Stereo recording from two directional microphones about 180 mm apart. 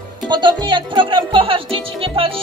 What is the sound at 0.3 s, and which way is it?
Speech, 25° right (ahead or behind).